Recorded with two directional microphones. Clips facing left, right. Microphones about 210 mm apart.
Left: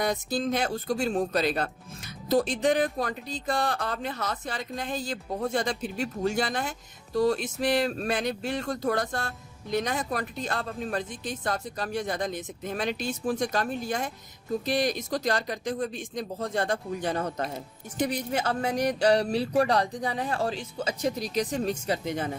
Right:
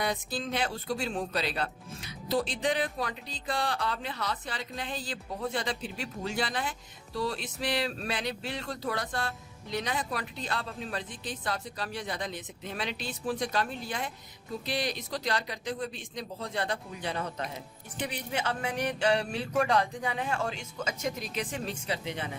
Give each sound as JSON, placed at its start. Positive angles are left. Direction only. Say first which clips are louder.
{"t": 0.0, "sound": "speech", "louder": "left 5 dB", "side_deg": 45}